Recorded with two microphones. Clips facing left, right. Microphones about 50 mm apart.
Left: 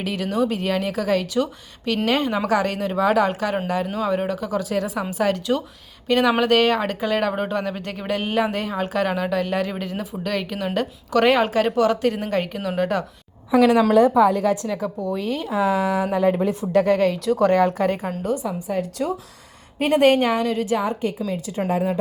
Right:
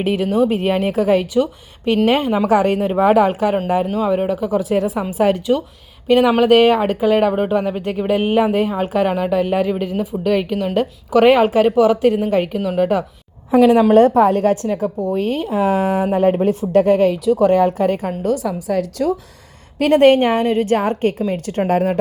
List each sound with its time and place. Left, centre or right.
0.0 s speech: right
0.3 s a woman's voice: centre
0.5 s a woman's voice: right
3.8 s a woman's voice: centre
13.6 s speech: right
13.9 s a woman's voice: right
18.0 s a woman's voice: right
18.4 s a woman's voice: right
20.0 s a woman's voice: right